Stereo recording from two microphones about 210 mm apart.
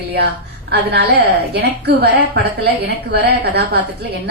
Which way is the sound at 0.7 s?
50° right (ahead or behind).